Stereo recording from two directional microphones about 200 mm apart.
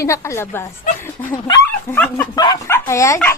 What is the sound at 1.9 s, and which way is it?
Speech, 10° left (ahead or behind).